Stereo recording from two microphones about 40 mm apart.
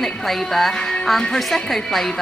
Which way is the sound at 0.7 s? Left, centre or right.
Left.